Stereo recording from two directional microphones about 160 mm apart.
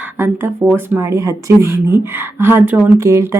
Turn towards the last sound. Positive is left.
turn(degrees=-20)  # may be behind; listen again after turning